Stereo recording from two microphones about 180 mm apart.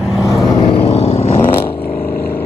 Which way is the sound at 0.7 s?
35° left (ahead or behind).